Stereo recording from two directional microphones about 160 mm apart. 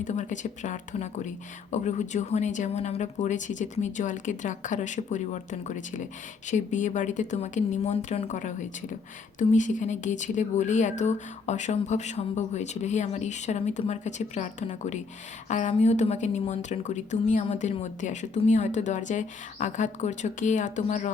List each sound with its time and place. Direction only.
0.0 s speech: 50° left (ahead or behind)